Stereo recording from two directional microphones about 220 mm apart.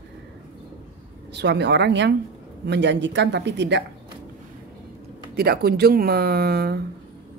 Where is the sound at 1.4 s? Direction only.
50° right (ahead or behind).